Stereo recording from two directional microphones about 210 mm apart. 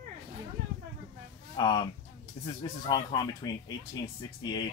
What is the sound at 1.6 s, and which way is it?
Speech, 20° left (ahead or behind).